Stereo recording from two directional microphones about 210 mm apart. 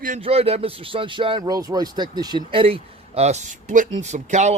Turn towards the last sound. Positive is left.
turn(degrees=-35)  # may be behind; listen again after turning